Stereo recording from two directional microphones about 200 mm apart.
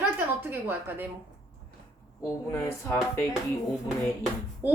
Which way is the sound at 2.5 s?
5° left (ahead or behind).